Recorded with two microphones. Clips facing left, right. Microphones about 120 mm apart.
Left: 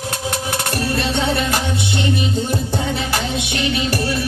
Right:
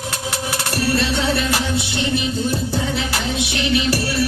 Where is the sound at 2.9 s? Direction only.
50° left (ahead or behind).